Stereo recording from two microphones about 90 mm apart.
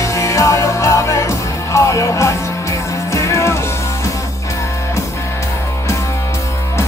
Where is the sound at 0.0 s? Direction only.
35° left (ahead or behind).